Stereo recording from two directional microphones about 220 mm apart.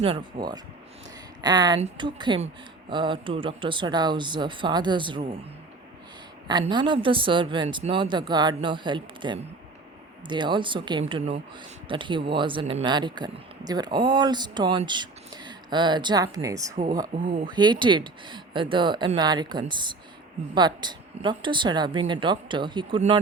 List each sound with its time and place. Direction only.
0.0 s speech: 20° right (ahead or behind)
6.5 s speech: 20° right (ahead or behind)